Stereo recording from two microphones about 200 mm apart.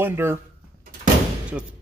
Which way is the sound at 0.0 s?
10° right (ahead or behind).